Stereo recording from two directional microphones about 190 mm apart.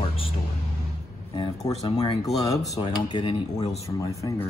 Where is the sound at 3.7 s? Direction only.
35° left (ahead or behind).